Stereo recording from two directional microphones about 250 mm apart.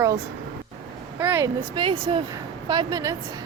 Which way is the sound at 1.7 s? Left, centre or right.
Centre.